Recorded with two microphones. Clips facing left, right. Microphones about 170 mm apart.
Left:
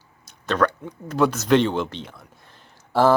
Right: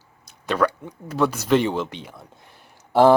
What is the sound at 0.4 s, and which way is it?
Speech, 10° right (ahead or behind).